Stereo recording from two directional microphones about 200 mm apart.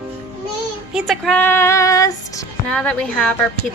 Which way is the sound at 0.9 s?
Centre (ahead or behind).